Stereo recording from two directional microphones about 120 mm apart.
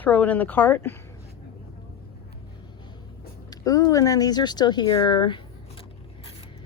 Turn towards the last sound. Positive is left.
turn(degrees=40)  # may be behind; listen again after turning